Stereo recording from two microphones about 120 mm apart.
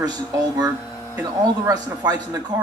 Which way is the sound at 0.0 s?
35° right (ahead or behind).